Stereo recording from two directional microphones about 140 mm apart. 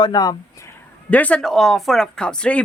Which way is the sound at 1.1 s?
10° left (ahead or behind).